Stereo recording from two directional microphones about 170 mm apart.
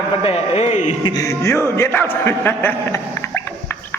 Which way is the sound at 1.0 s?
20° left (ahead or behind).